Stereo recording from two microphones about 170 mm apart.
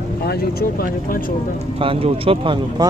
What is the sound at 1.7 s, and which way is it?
Speech, 35° right (ahead or behind).